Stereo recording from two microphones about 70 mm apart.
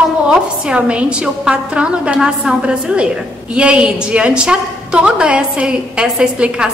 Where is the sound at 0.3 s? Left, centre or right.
Centre.